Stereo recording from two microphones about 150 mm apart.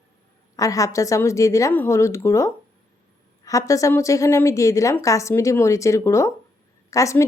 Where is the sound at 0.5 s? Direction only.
20° left (ahead or behind).